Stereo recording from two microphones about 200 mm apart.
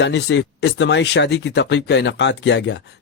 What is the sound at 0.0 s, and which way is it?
A man's voice, 60° left (ahead or behind).